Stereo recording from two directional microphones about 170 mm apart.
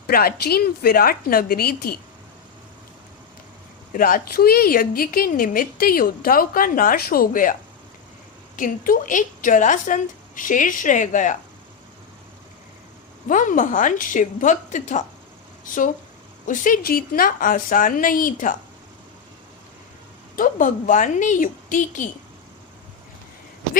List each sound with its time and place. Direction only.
0.1 s a woman's voice: 65° left (ahead or behind)
3.9 s a woman's voice: 55° left (ahead or behind)
8.5 s a woman's voice: 55° left (ahead or behind)
13.2 s a woman's voice: 50° left (ahead or behind)
20.3 s a woman's voice: 50° left (ahead or behind)